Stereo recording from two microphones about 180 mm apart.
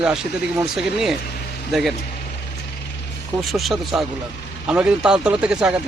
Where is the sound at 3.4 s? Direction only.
Centre (ahead or behind).